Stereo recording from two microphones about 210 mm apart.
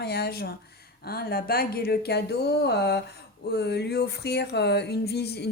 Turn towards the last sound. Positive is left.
turn(degrees=50)  # may be behind; listen again after turning